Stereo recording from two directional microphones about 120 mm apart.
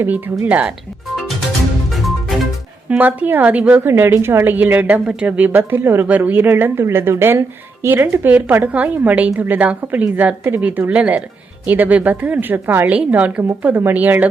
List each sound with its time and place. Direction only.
0.0 s speech: 20° right (ahead or behind)
0.4 s a woman's voice: 10° right (ahead or behind)
1.9 s music: centre (ahead or behind)
3.0 s a woman's voice: 15° right (ahead or behind)